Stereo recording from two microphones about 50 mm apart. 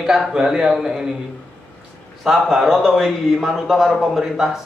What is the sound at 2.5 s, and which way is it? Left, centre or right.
A man's voice, centre.